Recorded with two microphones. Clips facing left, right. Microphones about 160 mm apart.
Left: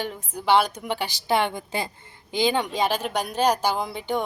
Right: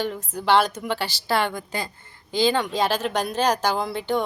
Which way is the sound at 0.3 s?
10° left (ahead or behind).